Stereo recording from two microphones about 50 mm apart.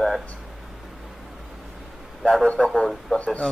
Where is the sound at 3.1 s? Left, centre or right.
Left.